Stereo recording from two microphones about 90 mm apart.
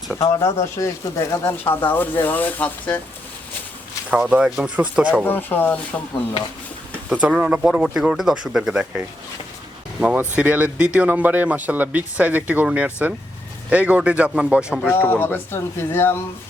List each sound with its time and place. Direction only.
0.2 s speech: 40° left (ahead or behind); by 3.0 s 20° left (ahead or behind)
4.1 s speech: 15° right (ahead or behind)
5.2 s speech: 20° left (ahead or behind)
7.1 s speech: 15° right (ahead or behind)
10.0 s speech: 15° right (ahead or behind)
14.8 s speech: 20° left (ahead or behind)